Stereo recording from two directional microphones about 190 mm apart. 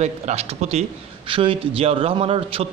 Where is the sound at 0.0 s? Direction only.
35° right (ahead or behind).